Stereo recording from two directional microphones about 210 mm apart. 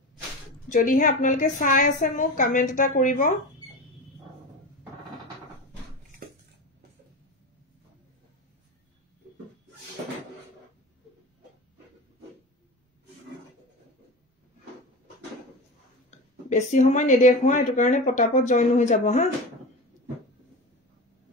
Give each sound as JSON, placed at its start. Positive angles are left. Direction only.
{"t": 0.7, "sound": "speech", "side_deg": 40}
{"t": 16.4, "sound": "speech", "side_deg": 35}